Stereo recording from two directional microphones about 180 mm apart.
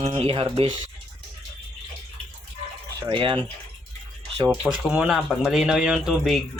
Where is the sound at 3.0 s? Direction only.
30° right (ahead or behind).